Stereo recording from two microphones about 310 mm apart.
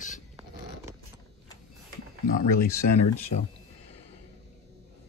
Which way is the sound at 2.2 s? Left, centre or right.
Left.